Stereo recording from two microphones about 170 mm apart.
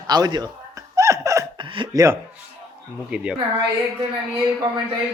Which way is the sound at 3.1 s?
5° right (ahead or behind).